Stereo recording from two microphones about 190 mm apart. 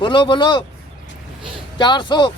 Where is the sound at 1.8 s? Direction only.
25° left (ahead or behind).